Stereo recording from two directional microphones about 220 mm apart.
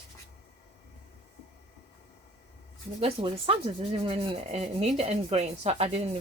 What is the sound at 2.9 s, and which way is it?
Speech, 25° right (ahead or behind).